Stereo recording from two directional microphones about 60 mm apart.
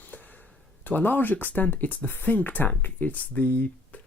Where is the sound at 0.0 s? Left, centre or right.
Left.